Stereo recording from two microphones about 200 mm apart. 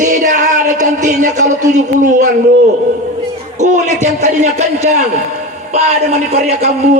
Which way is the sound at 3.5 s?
35° right (ahead or behind).